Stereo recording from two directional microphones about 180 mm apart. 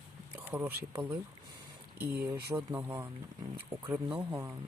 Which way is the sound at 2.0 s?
10° right (ahead or behind).